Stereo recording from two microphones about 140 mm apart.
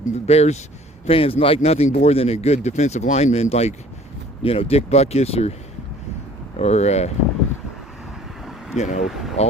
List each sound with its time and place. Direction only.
0.0 s speech: 50° left (ahead or behind)
6.6 s speech: 50° left (ahead or behind)
8.7 s speech: 55° left (ahead or behind)